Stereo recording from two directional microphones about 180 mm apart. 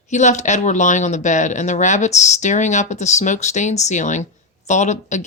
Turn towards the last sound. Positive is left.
turn(degrees=40)  # may be behind; listen again after turning